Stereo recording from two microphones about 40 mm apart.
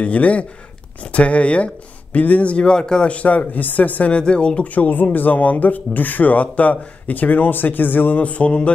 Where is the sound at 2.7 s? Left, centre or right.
Centre.